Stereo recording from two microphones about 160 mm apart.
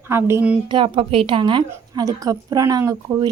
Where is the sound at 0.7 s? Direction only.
30° right (ahead or behind).